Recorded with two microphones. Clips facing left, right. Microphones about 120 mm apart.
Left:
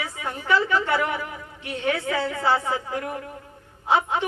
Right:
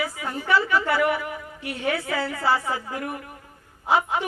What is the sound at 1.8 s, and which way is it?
A man's voice, 30° left (ahead or behind).